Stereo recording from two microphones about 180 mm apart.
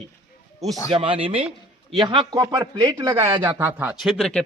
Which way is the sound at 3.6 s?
10° right (ahead or behind).